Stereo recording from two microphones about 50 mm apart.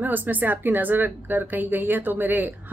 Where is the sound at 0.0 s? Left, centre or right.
Right.